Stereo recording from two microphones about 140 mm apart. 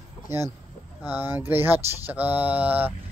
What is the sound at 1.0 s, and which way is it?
Speech, 15° right (ahead or behind).